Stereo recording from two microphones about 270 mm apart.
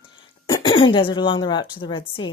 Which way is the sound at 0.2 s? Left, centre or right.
Centre.